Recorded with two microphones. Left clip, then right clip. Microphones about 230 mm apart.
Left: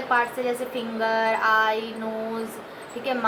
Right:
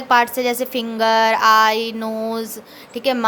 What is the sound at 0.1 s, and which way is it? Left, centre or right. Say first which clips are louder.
A woman's voice: right 8 dB; right.